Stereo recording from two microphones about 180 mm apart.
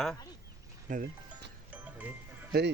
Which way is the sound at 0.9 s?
45° right (ahead or behind).